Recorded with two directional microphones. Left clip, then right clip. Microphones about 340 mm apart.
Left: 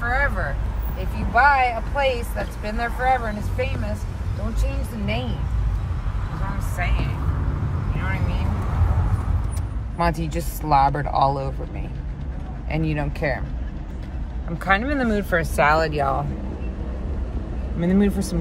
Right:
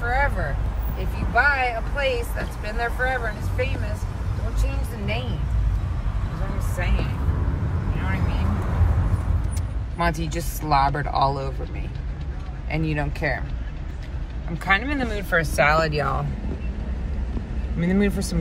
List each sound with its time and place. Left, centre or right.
0.0 s speech: centre
7.9 s vehicle: centre
9.9 s speech: centre
12.6 s speech: centre
14.7 s speech: centre
17.7 s speech: centre